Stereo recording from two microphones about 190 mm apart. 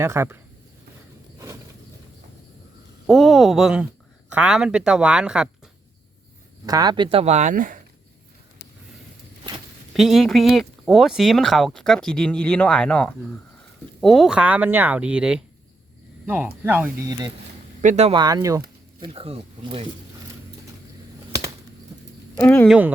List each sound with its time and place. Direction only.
0.0 s speech: 15° right (ahead or behind)
3.1 s speech: centre (ahead or behind)
6.7 s speech: 20° right (ahead or behind); by 7.8 s 45° right (ahead or behind)
9.9 s speech: centre (ahead or behind)
17.1 s speech: 20° right (ahead or behind)
17.8 s speech: 35° right (ahead or behind)
18.1 s speech: 20° right (ahead or behind)
22.4 s speech: 10° left (ahead or behind)